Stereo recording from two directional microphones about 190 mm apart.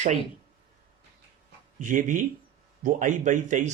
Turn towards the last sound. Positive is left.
turn(degrees=-40)  # may be behind; listen again after turning